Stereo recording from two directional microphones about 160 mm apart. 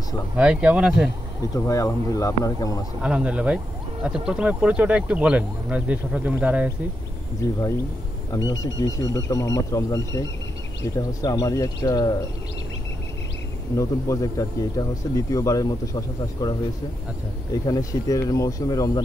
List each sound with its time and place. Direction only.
0.4 s speech: 5° right (ahead or behind)
1.5 s speech: 20° left (ahead or behind)
3.0 s speech: 5° right (ahead or behind)
7.4 s speech: 20° left (ahead or behind)
13.7 s speech: 20° left (ahead or behind)
17.6 s speech: 20° left (ahead or behind)